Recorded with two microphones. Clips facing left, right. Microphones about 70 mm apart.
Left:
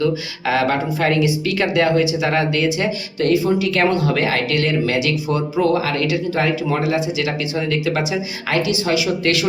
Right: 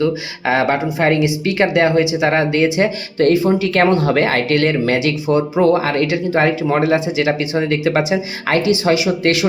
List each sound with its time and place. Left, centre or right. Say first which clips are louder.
0.0 s speech: right 2 dB; right
8.7 s speech: right 4 dB; right